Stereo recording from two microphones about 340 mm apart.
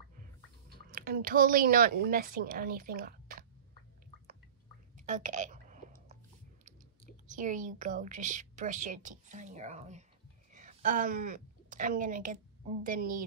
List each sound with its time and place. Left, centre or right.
0.9 s a woman's voice: right
4.9 s a sound: right
7.2 s a woman's voice: right